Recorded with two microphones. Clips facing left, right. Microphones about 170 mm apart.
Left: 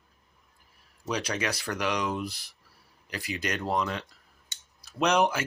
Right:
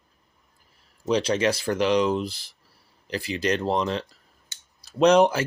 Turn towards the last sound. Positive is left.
turn(degrees=-30)  # may be behind; listen again after turning